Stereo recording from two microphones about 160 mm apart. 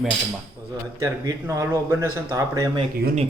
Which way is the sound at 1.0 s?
20° right (ahead or behind).